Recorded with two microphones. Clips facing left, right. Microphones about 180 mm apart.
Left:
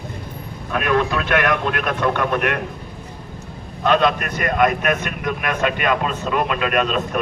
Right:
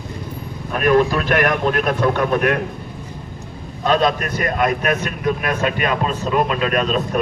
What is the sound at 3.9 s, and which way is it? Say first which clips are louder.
Speech: even; 35° right (ahead or behind).